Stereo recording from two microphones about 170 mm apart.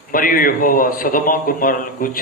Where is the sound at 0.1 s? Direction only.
55° left (ahead or behind).